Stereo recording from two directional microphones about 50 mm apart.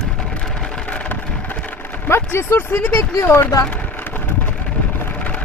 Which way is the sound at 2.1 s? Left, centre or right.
Left.